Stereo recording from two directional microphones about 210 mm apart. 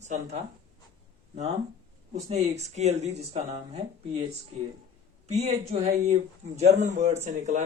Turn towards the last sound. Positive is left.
turn(degrees=-35)  # may be behind; listen again after turning